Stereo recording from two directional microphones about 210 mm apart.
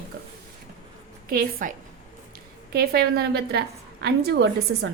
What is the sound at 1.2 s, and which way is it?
A woman's voice, 40° right (ahead or behind).